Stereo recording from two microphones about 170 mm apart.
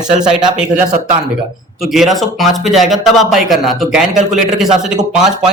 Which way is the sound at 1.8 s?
Centre (ahead or behind).